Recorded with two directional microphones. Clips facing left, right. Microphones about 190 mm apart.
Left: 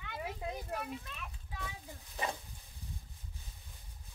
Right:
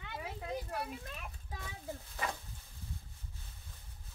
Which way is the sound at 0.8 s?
45° right (ahead or behind).